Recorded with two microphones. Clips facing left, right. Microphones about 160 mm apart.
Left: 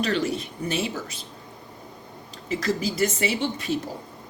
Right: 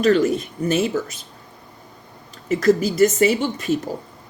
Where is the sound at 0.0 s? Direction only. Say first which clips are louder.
Right 8 dB; 45° right (ahead or behind).